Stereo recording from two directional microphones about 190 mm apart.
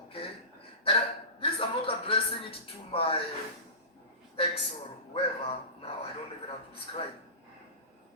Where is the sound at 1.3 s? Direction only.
30° left (ahead or behind).